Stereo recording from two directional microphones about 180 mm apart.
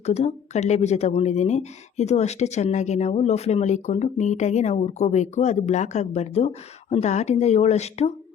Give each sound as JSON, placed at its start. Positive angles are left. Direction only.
{"t": 0.0, "sound": "speech", "side_deg": 35}